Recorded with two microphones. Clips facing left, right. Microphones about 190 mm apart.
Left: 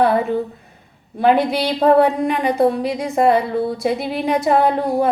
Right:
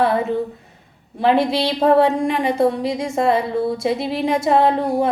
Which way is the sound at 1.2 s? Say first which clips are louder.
Left 1 dB; 25° right (ahead or behind).